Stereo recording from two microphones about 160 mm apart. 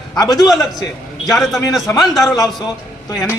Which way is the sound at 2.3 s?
20° left (ahead or behind).